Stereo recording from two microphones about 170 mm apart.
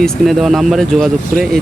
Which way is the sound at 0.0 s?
Centre (ahead or behind).